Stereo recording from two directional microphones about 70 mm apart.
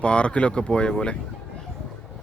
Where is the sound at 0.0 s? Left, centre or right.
Centre.